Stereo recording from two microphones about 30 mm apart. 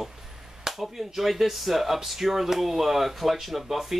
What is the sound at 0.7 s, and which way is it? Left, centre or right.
Speech, centre.